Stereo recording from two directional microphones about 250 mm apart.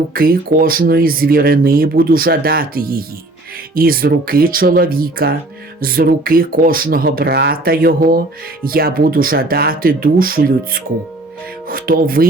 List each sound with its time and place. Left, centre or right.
0.1 s speech: right